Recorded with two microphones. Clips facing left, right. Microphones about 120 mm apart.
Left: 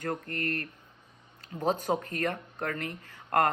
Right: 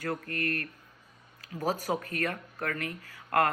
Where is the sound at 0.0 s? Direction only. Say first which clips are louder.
Even; 25° left (ahead or behind).